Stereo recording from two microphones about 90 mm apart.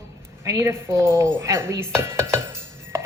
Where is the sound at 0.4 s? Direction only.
35° right (ahead or behind).